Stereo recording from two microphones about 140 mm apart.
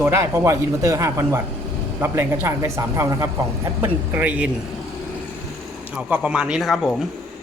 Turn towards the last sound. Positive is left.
turn(degrees=5)  # may be behind; listen again after turning